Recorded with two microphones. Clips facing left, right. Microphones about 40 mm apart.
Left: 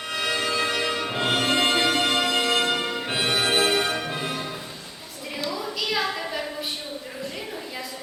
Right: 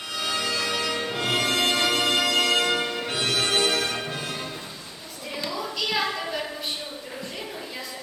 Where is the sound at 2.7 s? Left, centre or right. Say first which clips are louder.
Even; centre.